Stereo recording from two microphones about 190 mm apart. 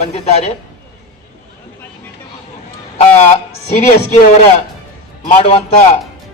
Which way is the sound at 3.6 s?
35° left (ahead or behind).